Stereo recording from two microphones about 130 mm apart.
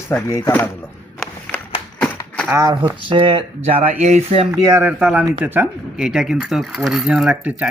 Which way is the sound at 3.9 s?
60° right (ahead or behind).